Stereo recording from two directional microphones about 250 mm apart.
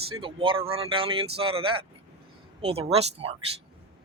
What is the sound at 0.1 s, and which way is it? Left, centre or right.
Speech, right.